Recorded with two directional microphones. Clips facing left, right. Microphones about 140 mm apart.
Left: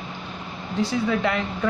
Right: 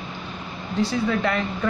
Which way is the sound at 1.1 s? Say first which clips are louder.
Even; 15° left (ahead or behind).